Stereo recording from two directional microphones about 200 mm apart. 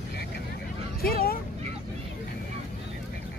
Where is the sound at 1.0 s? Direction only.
50° left (ahead or behind).